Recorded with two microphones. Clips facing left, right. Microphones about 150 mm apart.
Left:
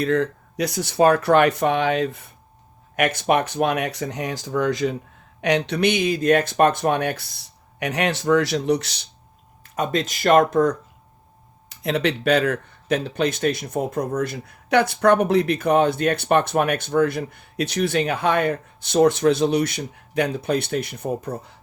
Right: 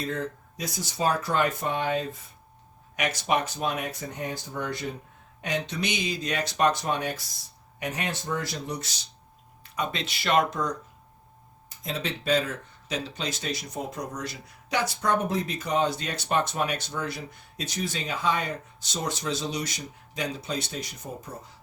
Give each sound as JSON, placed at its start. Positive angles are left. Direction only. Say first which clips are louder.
{"t": 0.0, "sound": "speech", "louder": "left 10 dB", "side_deg": 70}
{"t": 2.9, "sound": "speech", "louder": "left 7 dB", "side_deg": 55}
{"t": 5.4, "sound": "speech", "louder": "left 10 dB", "side_deg": 70}
{"t": 7.8, "sound": "speech", "louder": "left 9 dB", "side_deg": 75}
{"t": 9.7, "sound": "speech", "louder": "left 8 dB", "side_deg": 45}
{"t": 11.7, "sound": "speech", "louder": "left 10 dB", "side_deg": 70}